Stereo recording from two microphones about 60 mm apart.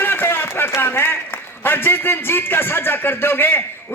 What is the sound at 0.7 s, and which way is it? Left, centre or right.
A man's voice, left.